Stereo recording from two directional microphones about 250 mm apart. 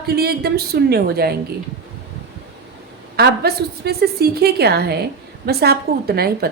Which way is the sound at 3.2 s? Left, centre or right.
Right.